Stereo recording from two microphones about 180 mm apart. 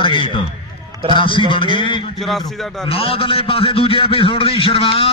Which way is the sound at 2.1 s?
Centre (ahead or behind).